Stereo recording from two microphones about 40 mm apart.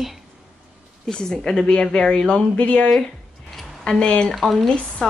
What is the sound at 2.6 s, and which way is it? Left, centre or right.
Speech, left.